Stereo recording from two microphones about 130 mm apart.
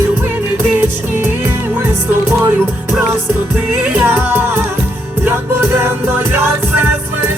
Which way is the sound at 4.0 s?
15° right (ahead or behind).